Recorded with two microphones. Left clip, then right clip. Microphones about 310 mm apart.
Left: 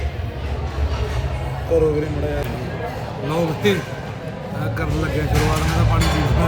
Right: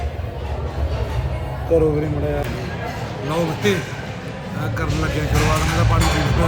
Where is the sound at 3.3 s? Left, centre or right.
Centre.